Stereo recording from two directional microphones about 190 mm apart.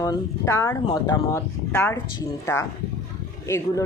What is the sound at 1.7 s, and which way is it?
Speech, 10° left (ahead or behind).